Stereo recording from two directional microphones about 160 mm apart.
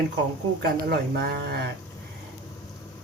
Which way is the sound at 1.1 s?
85° right.